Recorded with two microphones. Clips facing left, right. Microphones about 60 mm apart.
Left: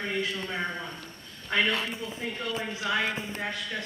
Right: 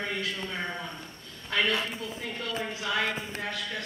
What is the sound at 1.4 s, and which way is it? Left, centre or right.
A man's voice, centre.